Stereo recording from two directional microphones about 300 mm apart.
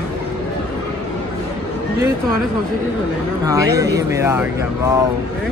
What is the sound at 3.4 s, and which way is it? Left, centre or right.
Speech, centre.